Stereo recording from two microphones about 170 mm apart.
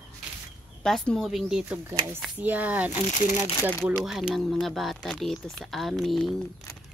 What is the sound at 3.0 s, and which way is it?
Speech, 45° left (ahead or behind).